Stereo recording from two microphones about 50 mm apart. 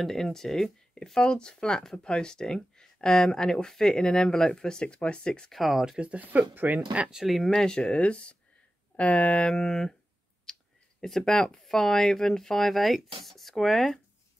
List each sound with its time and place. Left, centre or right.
0.0 s speech: centre
5.5 s speech: centre
5.9 s speech: right
6.2 s speech: right
6.9 s speech: right
7.2 s speech: centre
7.5 s speech: centre
9.5 s speech: centre
10.5 s clicking: centre
11.0 s speech: centre